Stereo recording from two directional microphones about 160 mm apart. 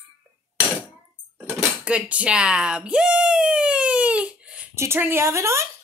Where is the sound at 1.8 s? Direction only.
5° right (ahead or behind).